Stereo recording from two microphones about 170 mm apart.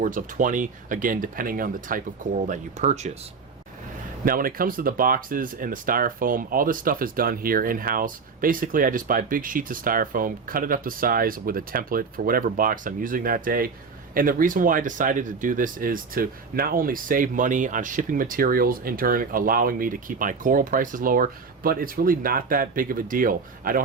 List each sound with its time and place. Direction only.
0.0 s speech: 50° right (ahead or behind)
2.5 s speech: 40° right (ahead or behind)
4.3 s speech: 55° right (ahead or behind)